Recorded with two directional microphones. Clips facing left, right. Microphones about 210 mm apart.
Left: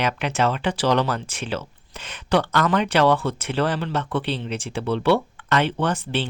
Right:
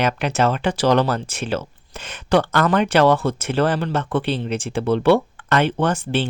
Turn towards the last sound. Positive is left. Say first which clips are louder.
# right 3 dB
turn(degrees=-50)  # may be behind; listen again after turning